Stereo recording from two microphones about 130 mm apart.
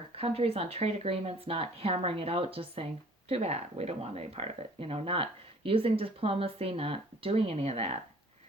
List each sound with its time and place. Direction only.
0.2 s speech: 50° right (ahead or behind)